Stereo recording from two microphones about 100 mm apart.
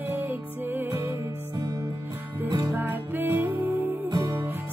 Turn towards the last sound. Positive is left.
turn(degrees=-40)  # may be behind; listen again after turning